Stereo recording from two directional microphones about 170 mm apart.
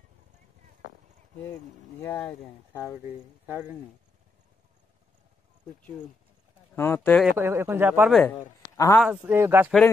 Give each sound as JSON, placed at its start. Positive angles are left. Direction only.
{"t": 2.0, "sound": "speech", "side_deg": 15}
{"t": 6.7, "sound": "speech", "side_deg": 10}
{"t": 7.2, "sound": "speech", "side_deg": -15}
{"t": 8.3, "sound": "a man's voice", "side_deg": 20}
{"t": 9.0, "sound": "speech", "side_deg": -10}